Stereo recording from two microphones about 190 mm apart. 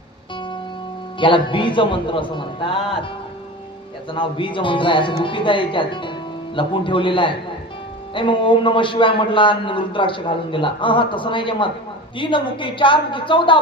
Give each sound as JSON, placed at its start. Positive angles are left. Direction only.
{"t": 1.2, "sound": "a man's voice", "side_deg": 25}
{"t": 4.1, "sound": "a man's voice", "side_deg": 25}